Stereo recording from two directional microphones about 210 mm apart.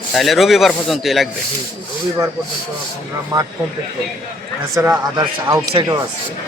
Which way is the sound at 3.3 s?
15° right (ahead or behind).